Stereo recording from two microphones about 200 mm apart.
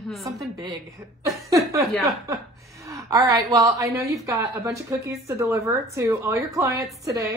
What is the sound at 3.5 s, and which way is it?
Speech, 15° right (ahead or behind).